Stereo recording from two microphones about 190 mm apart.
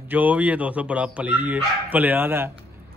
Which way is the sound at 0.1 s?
10° right (ahead or behind).